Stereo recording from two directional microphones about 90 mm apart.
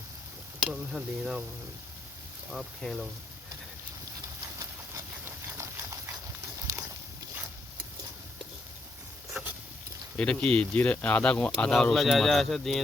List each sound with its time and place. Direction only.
0.7 s speech: 5° right (ahead or behind)
2.5 s speech: 5° right (ahead or behind)
4.4 s dog: 35° right (ahead or behind)
10.2 s speech: 10° left (ahead or behind)